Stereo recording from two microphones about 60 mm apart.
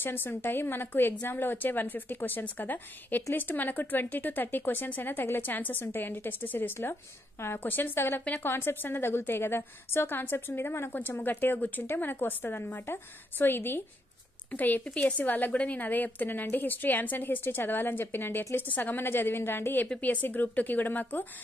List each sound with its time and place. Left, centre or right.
0.0 s a woman's voice: left